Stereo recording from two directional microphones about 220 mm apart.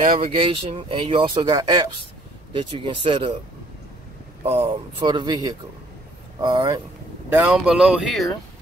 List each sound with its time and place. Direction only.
0.0 s speech: 25° right (ahead or behind)
4.4 s speech: 25° right (ahead or behind)
7.3 s speech: 5° right (ahead or behind)